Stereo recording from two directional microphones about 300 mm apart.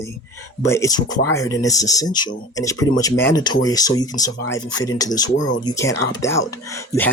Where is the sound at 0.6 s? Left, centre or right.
Centre.